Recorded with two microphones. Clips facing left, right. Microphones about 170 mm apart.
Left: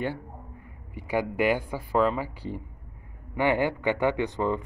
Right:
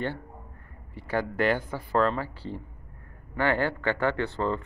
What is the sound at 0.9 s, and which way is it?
Speech, 15° left (ahead or behind).